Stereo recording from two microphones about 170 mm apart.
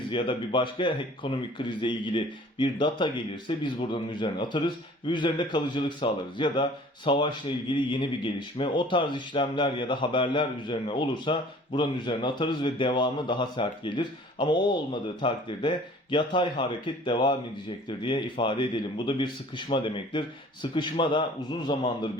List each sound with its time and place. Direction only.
0.1 s speech: 30° left (ahead or behind)